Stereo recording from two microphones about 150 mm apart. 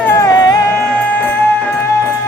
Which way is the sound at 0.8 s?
10° left (ahead or behind).